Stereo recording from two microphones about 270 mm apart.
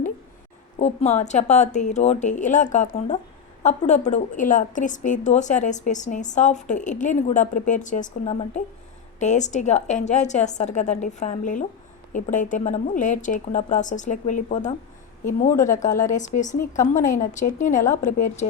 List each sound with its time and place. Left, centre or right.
0.8 s a woman's voice: left